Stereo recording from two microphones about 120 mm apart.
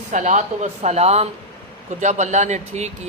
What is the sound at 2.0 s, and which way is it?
Speech, 85° right.